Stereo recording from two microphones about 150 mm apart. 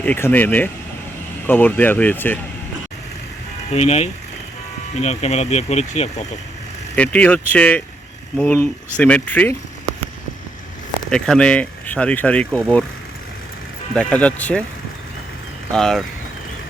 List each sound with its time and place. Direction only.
0.0 s speech: 10° left (ahead or behind)
3.7 s speech: 45° left (ahead or behind)
6.9 s speech: 10° left (ahead or behind)
11.1 s speech: 5° left (ahead or behind)
13.9 s speech: 5° left (ahead or behind)
15.7 s speech: 5° left (ahead or behind)